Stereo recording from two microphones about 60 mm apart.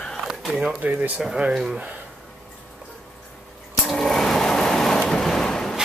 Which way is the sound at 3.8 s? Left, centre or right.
Centre.